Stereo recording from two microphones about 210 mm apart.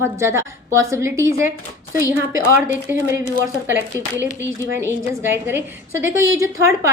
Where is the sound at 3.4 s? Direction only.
10° right (ahead or behind).